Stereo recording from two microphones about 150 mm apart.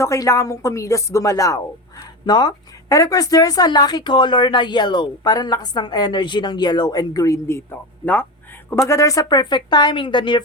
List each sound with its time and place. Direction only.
0.0 s speech: 20° left (ahead or behind)
8.9 s speech: 20° left (ahead or behind)